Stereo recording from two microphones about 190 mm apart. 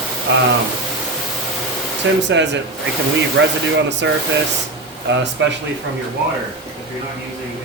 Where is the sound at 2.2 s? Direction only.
70° right (ahead or behind).